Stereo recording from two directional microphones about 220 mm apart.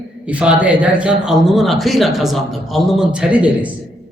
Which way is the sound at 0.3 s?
5° right (ahead or behind).